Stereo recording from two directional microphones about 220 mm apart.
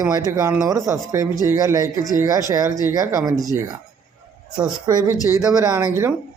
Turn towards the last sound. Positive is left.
turn(degrees=-10)  # may be behind; listen again after turning